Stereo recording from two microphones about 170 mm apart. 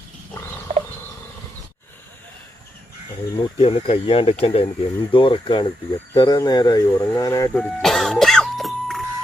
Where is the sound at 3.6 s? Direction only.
35° left (ahead or behind); by 7.5 s 20° left (ahead or behind).